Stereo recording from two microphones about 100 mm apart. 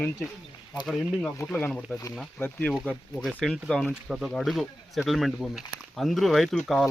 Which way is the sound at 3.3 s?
5° left (ahead or behind).